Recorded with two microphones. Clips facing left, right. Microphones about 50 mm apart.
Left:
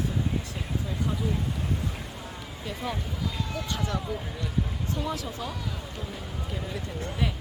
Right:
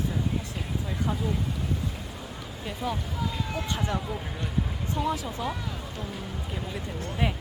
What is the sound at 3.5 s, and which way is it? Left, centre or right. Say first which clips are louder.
Speech: right 1 dB; right.